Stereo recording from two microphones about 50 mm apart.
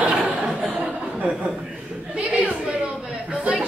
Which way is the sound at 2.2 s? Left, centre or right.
Right.